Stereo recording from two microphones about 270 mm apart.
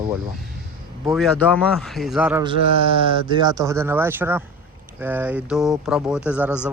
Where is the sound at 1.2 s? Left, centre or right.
Centre.